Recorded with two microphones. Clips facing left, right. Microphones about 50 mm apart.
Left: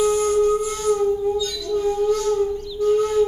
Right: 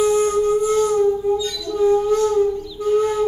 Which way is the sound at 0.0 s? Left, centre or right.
Centre.